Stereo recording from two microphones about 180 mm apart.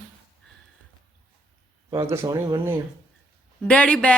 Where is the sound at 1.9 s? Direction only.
15° right (ahead or behind).